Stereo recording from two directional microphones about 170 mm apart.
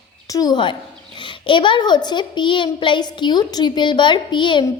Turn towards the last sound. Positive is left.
turn(degrees=30)  # may be behind; listen again after turning